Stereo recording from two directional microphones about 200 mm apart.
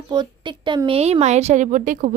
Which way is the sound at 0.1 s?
25° right (ahead or behind).